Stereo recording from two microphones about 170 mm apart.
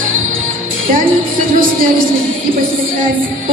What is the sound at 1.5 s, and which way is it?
Speech, 55° right (ahead or behind).